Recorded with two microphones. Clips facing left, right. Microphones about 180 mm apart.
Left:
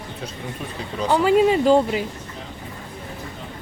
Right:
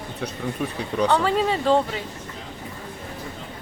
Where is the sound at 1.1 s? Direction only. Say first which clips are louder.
Left 6 dB; 10° left (ahead or behind).